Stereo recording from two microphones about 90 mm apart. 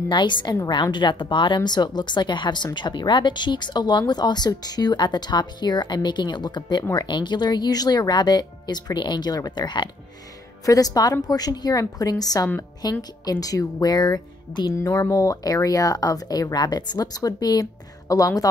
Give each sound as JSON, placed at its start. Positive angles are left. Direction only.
{"t": 0.1, "sound": "speech", "side_deg": 60}
{"t": 10.6, "sound": "speech", "side_deg": 40}
{"t": 14.7, "sound": "speech", "side_deg": 35}